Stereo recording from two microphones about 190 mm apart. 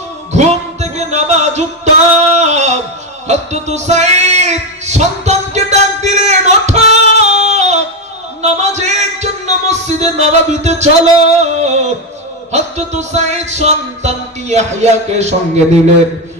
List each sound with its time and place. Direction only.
0.3 s music: 35° right (ahead or behind)
2.3 s a sound: 35° right (ahead or behind)
3.2 s music: 35° right (ahead or behind)
7.3 s singing: 35° right (ahead or behind)
8.4 s music: 35° right (ahead or behind)